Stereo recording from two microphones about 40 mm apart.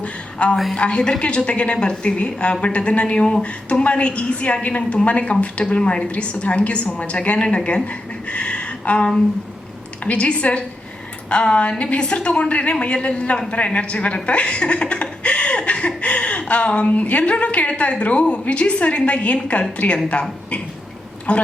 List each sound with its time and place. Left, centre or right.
0.0 s a sound: left
0.8 s a woman's voice: left
15.2 s chuckle: left
16.5 s a woman's voice: left
21.3 s a woman's voice: left